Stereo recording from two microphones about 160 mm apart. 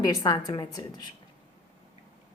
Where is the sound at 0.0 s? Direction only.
25° left (ahead or behind).